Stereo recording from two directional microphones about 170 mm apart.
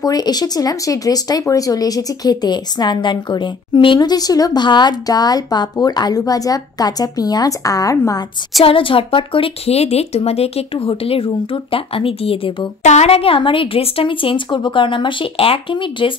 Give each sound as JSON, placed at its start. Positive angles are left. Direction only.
{"t": 0.0, "sound": "speech", "side_deg": 25}
{"t": 8.6, "sound": "speech", "side_deg": 30}